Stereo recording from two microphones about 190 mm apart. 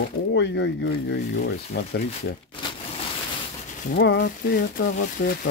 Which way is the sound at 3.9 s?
65° left (ahead or behind).